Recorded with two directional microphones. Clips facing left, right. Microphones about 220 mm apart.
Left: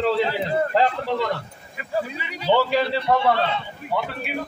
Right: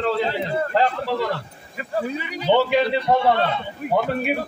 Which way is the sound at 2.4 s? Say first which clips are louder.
Right 2 dB; 20° right (ahead or behind).